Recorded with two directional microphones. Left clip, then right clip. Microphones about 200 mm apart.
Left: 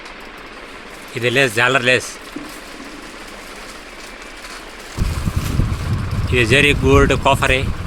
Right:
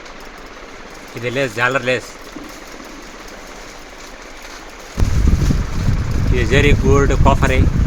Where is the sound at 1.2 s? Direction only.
20° left (ahead or behind).